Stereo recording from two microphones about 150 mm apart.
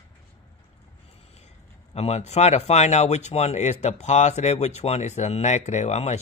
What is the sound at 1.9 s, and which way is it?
Speech, 45° left (ahead or behind).